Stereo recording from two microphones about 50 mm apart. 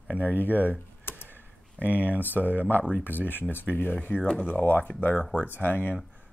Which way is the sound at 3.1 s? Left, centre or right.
Left.